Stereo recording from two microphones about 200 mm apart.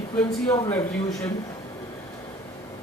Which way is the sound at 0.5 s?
15° left (ahead or behind).